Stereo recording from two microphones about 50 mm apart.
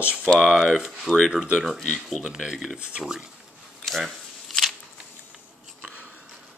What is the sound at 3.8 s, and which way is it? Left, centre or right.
Shuffling cards, centre.